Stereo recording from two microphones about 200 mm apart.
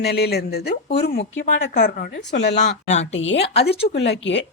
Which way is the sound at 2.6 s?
35° left (ahead or behind).